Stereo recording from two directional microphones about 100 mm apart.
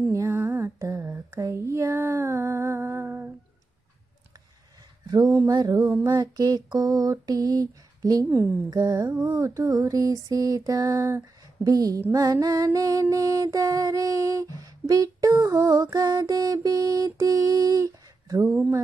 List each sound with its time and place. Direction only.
0.1 s humming: 30° right (ahead or behind)
0.9 s a sound: 20° right (ahead or behind)
5.0 s a sound: 40° right (ahead or behind)
5.5 s music: 40° right (ahead or behind)
5.8 s female singing: 20° right (ahead or behind)
6.0 s music: 40° right (ahead or behind)